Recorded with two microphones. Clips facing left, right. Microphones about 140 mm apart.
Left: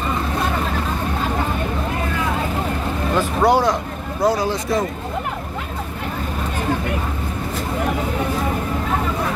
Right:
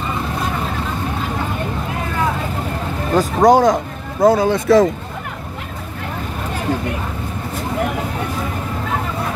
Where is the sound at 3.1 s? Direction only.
45° right (ahead or behind); by 4.9 s 80° right.